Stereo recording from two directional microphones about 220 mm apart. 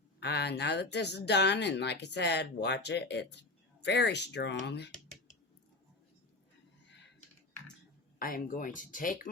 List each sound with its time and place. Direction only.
0.2 s speech: 50° left (ahead or behind)
6.8 s typing: 55° left (ahead or behind)
8.2 s speech: 40° left (ahead or behind)